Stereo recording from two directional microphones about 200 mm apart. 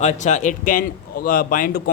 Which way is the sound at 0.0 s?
35° left (ahead or behind).